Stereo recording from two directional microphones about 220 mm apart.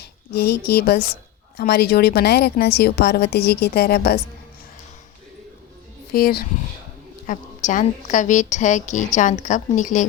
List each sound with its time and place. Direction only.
0.0 s a woman's voice: 45° left (ahead or behind)
6.1 s a woman's voice: 40° left (ahead or behind)